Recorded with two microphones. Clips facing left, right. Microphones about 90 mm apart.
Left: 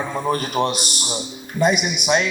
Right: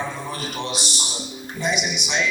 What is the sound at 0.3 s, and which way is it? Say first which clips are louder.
A man's voice: left 9 dB; 50° left (ahead or behind).